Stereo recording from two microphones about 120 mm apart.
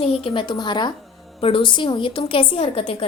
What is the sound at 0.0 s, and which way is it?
Speech, 50° left (ahead or behind).